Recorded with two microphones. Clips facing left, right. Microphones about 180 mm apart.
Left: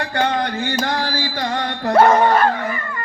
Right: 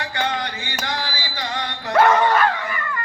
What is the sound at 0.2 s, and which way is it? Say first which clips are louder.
Music: left 6 dB; 50° left (ahead or behind).